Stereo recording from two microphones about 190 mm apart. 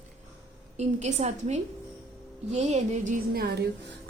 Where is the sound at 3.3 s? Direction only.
55° right (ahead or behind).